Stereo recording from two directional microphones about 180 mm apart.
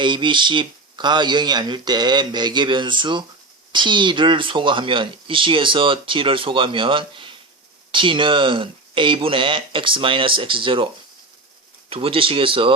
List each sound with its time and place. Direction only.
0.0 s speech: 25° right (ahead or behind)
11.9 s speech: 30° right (ahead or behind)